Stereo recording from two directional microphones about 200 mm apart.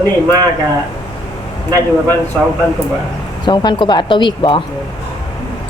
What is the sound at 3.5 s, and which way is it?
A woman's voice, 25° left (ahead or behind).